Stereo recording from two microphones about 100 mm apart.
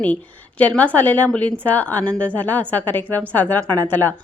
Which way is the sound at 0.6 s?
15° left (ahead or behind).